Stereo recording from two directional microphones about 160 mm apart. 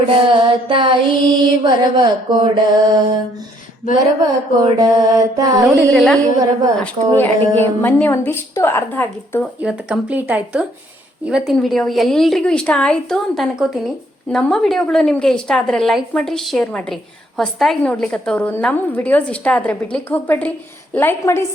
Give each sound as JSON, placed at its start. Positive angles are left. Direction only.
{"t": 0.3, "sound": "mantra", "side_deg": -30}
{"t": 3.9, "sound": "mantra", "side_deg": -25}
{"t": 5.9, "sound": "a woman's voice", "side_deg": 0}
{"t": 6.1, "sound": "mantra", "side_deg": -20}
{"t": 6.8, "sound": "a woman's voice", "side_deg": 10}
{"t": 9.6, "sound": "a woman's voice", "side_deg": -5}